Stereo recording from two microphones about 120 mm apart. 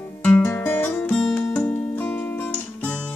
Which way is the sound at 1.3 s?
10° left (ahead or behind).